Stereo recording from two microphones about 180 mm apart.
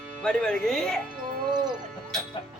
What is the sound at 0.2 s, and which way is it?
Speech, 5° left (ahead or behind).